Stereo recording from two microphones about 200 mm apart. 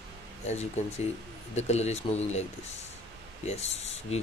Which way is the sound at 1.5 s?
35° left (ahead or behind).